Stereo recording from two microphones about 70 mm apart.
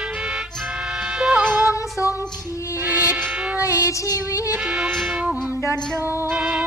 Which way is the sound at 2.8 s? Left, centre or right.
Right.